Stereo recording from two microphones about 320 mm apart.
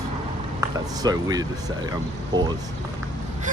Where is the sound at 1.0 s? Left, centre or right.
Centre.